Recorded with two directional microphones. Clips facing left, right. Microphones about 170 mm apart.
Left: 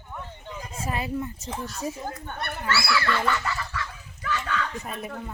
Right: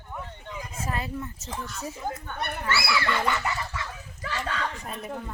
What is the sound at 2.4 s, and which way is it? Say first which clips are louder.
Speech: left 1 dB; 15° right (ahead or behind).